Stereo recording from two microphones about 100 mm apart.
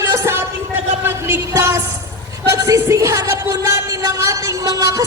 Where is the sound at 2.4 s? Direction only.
30° right (ahead or behind).